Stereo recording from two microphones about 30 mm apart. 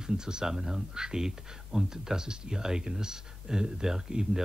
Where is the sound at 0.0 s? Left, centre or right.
Right.